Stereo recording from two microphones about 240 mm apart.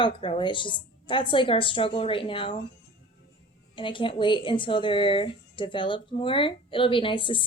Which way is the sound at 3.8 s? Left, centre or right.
Left.